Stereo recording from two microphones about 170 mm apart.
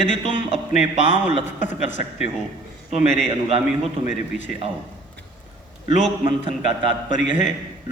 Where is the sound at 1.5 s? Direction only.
45° left (ahead or behind).